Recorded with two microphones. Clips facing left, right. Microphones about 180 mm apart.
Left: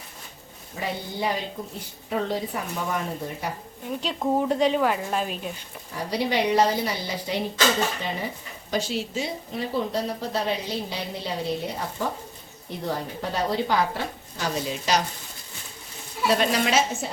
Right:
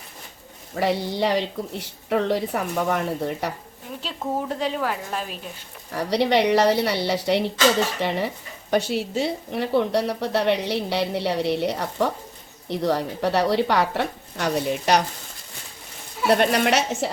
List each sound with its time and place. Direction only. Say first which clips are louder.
0.8 s speech: right 7 dB; 80° right
4.4 s speech: left 4 dB; centre (ahead or behind)
5.9 s speech: right 6 dB; 70° right (ahead or behind)
8.7 s speech: right 5 dB; 60° right (ahead or behind)
16.2 s a woman's voice: right 3 dB; 60° right (ahead or behind); by 17.1 s 80° right